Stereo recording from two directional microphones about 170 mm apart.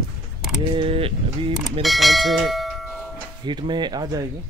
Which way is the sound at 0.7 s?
35° right (ahead or behind).